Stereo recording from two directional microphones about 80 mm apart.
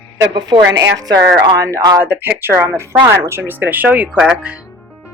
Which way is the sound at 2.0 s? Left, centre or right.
Right.